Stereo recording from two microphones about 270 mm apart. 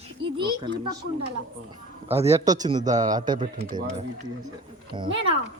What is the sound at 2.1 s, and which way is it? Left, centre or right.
A man's voice, right.